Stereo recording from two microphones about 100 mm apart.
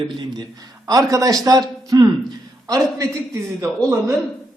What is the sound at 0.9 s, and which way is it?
A man's voice, 35° right (ahead or behind).